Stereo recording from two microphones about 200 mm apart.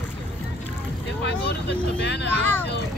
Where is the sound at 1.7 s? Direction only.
55° left (ahead or behind).